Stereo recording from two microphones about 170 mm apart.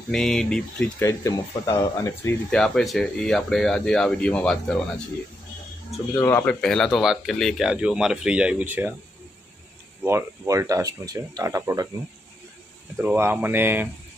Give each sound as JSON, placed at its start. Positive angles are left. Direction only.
{"t": 0.1, "sound": "speech", "side_deg": 5}
{"t": 1.0, "sound": "speech", "side_deg": 20}
{"t": 2.5, "sound": "speech", "side_deg": 5}
{"t": 6.1, "sound": "speech", "side_deg": 15}
{"t": 6.6, "sound": "speech", "side_deg": 5}
{"t": 10.0, "sound": "speech", "side_deg": -15}
{"t": 12.9, "sound": "speech", "side_deg": -10}